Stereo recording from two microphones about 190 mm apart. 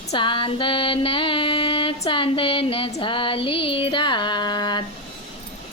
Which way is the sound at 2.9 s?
25° left (ahead or behind).